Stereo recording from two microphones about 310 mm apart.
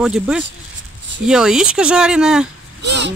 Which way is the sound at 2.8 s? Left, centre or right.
Right.